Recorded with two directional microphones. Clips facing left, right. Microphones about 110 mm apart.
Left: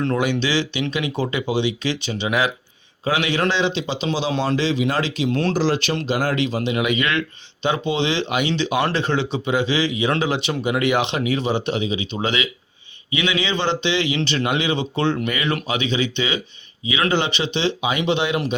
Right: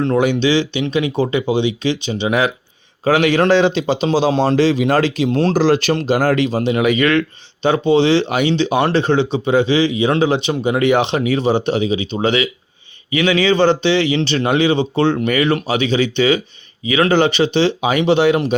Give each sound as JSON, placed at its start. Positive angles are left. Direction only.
{"t": 0.0, "sound": "speech", "side_deg": -25}
{"t": 3.0, "sound": "speech", "side_deg": -45}
{"t": 5.3, "sound": "speech", "side_deg": -30}
{"t": 5.5, "sound": "speech", "side_deg": -50}